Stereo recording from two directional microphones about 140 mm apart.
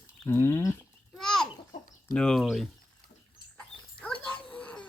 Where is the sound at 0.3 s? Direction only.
15° left (ahead or behind).